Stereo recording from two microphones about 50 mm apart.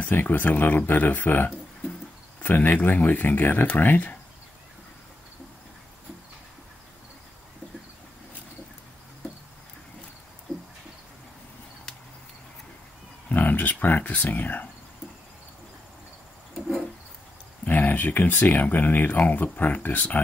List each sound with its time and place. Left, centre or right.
0.1 s speech: left
13.3 s speech: left
17.6 s speech: left